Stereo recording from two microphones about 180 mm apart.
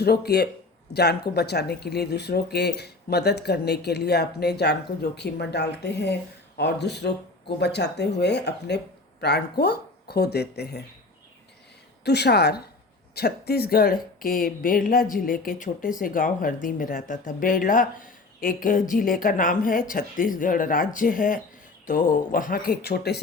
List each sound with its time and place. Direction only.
0.0 s speech: 65° left (ahead or behind)
12.0 s speech: 65° left (ahead or behind)